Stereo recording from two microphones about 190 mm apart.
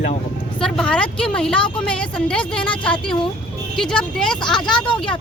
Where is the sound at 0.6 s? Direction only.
5° left (ahead or behind).